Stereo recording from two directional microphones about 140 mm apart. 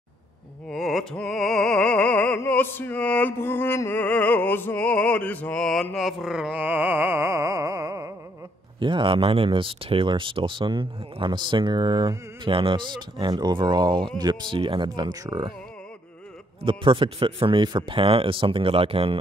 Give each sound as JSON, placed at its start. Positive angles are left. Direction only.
{"t": 0.7, "sound": "opera", "side_deg": 0}
{"t": 8.7, "sound": "speech", "side_deg": -35}
{"t": 16.6, "sound": "speech", "side_deg": -35}